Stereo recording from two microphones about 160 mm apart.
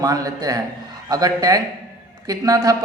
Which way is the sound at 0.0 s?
20° right (ahead or behind).